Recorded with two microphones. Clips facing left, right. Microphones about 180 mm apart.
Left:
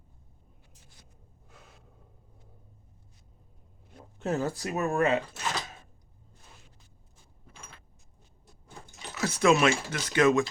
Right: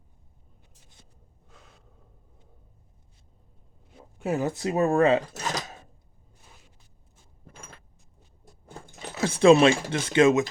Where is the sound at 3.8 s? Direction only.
5° right (ahead or behind); by 5.2 s 30° right (ahead or behind).